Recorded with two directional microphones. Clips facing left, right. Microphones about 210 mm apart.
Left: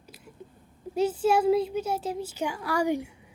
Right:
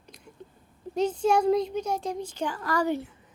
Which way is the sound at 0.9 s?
5° left (ahead or behind).